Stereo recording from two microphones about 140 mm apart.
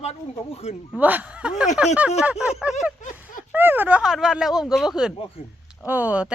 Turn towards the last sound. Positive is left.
turn(degrees=-10)  # may be behind; listen again after turning